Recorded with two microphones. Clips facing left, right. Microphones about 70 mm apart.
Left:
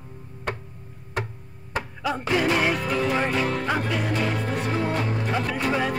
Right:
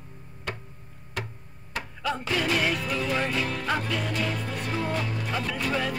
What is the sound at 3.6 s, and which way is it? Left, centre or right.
Music, centre.